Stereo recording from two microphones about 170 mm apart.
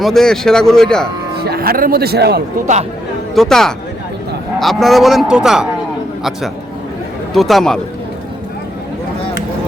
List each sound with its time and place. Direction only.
0.0 s speech: centre (ahead or behind)
1.5 s a man's voice: 60° right (ahead or behind)
3.3 s speech: centre (ahead or behind)
7.3 s speech: centre (ahead or behind)